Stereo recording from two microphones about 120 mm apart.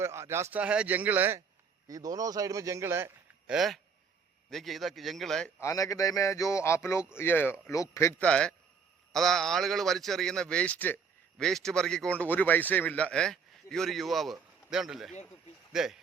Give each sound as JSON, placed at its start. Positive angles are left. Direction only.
{"t": 0.0, "sound": "speech", "side_deg": -25}
{"t": 0.6, "sound": "speech", "side_deg": -10}
{"t": 1.9, "sound": "speech", "side_deg": -30}
{"t": 3.4, "sound": "a man's voice", "side_deg": -5}
{"t": 5.5, "sound": "a man's voice", "side_deg": 25}
{"t": 8.2, "sound": "a man's voice", "side_deg": 10}
{"t": 11.3, "sound": "a man's voice", "side_deg": 5}